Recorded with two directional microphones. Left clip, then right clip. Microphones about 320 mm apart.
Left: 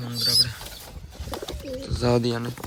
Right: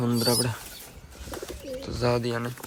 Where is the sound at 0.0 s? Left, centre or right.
Centre.